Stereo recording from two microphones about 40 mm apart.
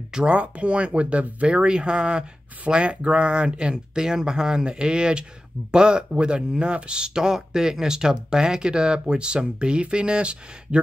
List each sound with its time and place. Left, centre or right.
0.1 s speech: right